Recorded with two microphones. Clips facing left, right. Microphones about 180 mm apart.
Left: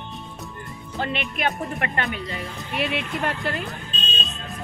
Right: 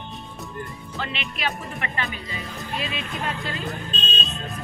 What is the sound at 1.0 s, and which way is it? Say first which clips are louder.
Speech: left 5 dB; 50° left (ahead or behind).